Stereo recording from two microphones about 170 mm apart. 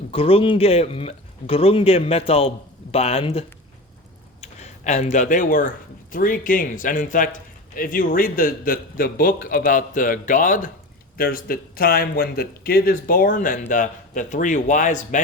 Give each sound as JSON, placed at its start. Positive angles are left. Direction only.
{"t": 0.1, "sound": "a man's voice", "side_deg": 35}